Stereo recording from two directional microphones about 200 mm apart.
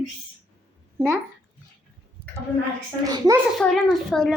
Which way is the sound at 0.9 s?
15° right (ahead or behind).